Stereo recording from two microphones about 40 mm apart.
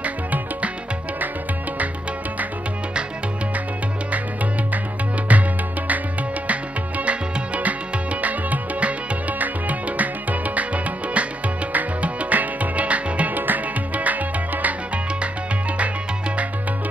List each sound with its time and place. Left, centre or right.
0.0 s music: right
5.3 s music: right
13.4 s music: right